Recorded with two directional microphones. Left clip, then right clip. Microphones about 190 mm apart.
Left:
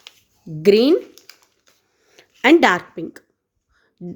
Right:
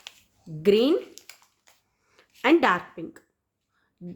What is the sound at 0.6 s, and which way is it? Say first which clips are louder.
Speech: left 7 dB; 35° left (ahead or behind).